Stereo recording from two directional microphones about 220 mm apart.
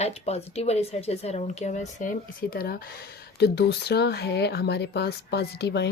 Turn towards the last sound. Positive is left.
turn(degrees=50)  # may be behind; listen again after turning